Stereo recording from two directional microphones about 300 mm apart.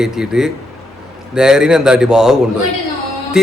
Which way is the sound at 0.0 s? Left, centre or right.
Centre.